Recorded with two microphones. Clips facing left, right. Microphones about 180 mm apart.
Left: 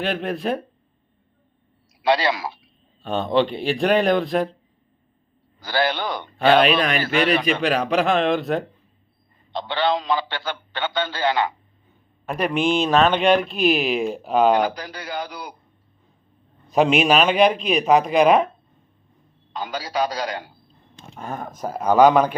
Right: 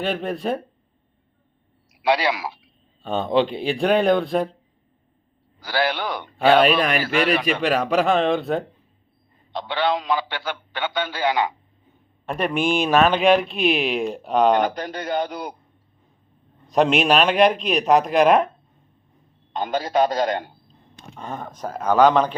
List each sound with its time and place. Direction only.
0.0 s speech: centre (ahead or behind)
2.0 s a man's voice: 10° right (ahead or behind)
5.5 s a man's voice: 10° right (ahead or behind)
9.5 s a man's voice: 10° right (ahead or behind)
12.2 s speech: 5° left (ahead or behind)
12.5 s a man's voice: 10° right (ahead or behind)
13.1 s speech: centre (ahead or behind)
14.7 s a man's voice: 50° right (ahead or behind)
16.6 s speech: centre (ahead or behind)
19.5 s a man's voice: 50° right (ahead or behind)
20.7 s speech: 5° left (ahead or behind)